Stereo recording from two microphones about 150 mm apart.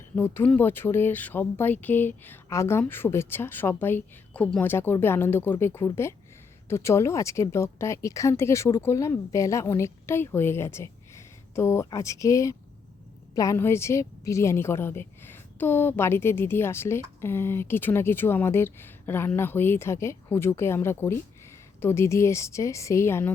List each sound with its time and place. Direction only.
0.2 s speech: 10° left (ahead or behind)